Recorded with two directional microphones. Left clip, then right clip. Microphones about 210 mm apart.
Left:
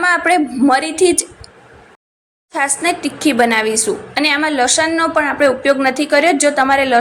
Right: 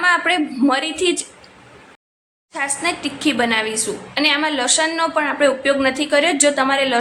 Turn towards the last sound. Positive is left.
turn(degrees=15)  # may be behind; listen again after turning